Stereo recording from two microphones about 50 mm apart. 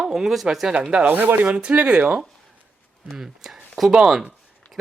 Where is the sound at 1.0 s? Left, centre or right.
Right.